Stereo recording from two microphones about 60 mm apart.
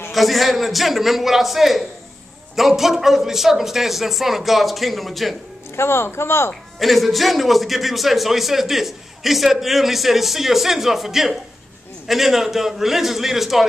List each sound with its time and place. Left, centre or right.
0.1 s a man's voice: centre
5.8 s speech: left
6.8 s a man's voice: centre